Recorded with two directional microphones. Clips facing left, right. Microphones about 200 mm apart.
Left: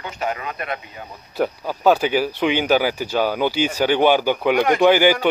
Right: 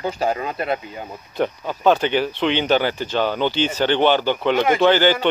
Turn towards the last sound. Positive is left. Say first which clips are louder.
# left 1 dB
turn(degrees=10)  # may be behind; listen again after turning